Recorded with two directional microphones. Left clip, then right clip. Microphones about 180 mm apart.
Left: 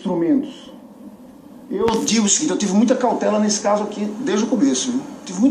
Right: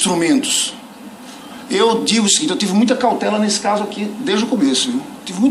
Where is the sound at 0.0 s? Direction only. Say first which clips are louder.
Right 4 dB; 25° right (ahead or behind).